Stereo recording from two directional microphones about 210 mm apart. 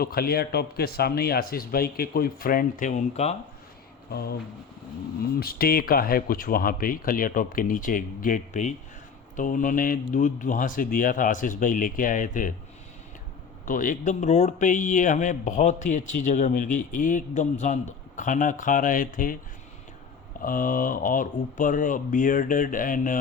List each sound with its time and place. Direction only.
0.0 s speech: 45° left (ahead or behind)
4.1 s speech: 50° left (ahead or behind)
5.4 s speech: 45° left (ahead or behind)
13.7 s speech: 40° left (ahead or behind)
20.4 s speech: 40° left (ahead or behind)